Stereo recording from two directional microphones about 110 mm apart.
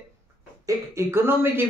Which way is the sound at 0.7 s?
25° right (ahead or behind).